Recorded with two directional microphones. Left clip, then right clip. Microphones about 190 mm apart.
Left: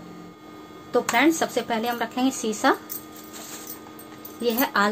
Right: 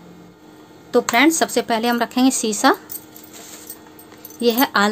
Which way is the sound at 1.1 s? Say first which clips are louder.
Right 5 dB; 55° right (ahead or behind).